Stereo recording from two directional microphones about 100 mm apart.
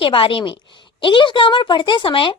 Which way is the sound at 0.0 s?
60° left (ahead or behind).